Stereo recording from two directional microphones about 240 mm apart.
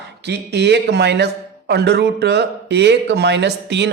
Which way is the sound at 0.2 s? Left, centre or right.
Right.